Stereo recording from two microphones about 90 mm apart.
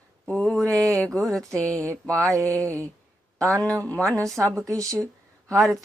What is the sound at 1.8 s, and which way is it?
Mantra, 30° right (ahead or behind).